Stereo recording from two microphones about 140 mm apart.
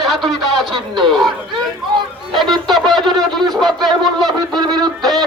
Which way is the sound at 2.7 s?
30° right (ahead or behind).